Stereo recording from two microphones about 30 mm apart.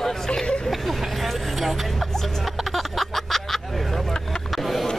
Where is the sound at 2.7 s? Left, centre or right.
Centre.